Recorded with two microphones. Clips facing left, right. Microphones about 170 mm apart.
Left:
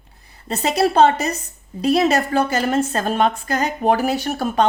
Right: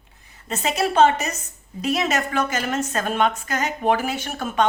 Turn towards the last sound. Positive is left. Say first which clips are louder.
# left 4 dB
turn(degrees=35)  # may be behind; listen again after turning